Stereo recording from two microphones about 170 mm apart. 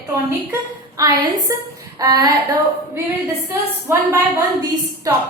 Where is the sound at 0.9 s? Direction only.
20° right (ahead or behind).